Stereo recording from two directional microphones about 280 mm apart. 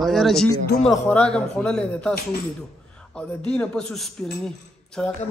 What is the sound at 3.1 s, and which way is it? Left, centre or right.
A man's voice, centre.